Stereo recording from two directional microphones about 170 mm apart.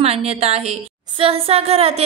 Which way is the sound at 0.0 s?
35° right (ahead or behind).